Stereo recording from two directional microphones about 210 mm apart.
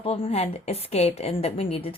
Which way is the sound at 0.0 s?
30° left (ahead or behind).